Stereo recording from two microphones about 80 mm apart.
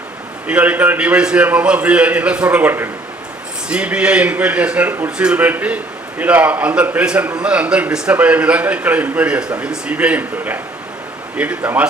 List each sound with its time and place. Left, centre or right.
0.4 s a man's voice: centre
3.7 s a man's voice: centre